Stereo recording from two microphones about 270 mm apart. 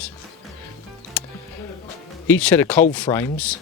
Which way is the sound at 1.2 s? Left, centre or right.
Centre.